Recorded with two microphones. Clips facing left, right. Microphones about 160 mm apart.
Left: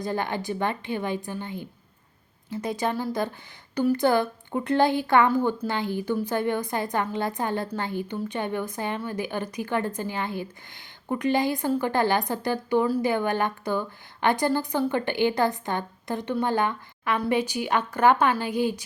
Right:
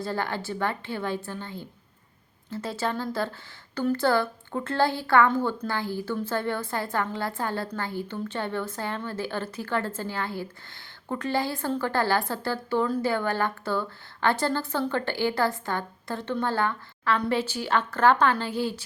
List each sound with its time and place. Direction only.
0.0 s a woman's voice: 15° left (ahead or behind)